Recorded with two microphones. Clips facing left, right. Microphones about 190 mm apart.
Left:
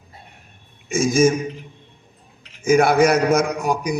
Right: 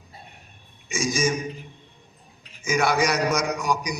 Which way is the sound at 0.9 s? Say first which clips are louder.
Left 9 dB; 55° left (ahead or behind).